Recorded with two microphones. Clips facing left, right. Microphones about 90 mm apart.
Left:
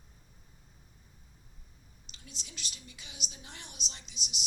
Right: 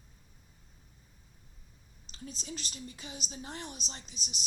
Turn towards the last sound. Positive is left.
turn(degrees=-40)  # may be behind; listen again after turning